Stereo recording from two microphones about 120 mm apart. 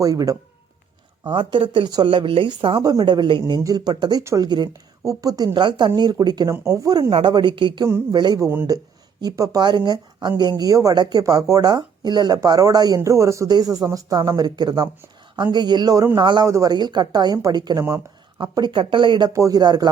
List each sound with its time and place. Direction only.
0.0 s speech: 30° right (ahead or behind)
1.3 s a woman's voice: 45° right (ahead or behind); by 7.1 s 30° right (ahead or behind)
7.1 s a woman's voice: 45° right (ahead or behind)
16.5 s speech: 25° right (ahead or behind)
16.7 s a woman's voice: 40° right (ahead or behind)
19.3 s a woman's voice: 30° right (ahead or behind)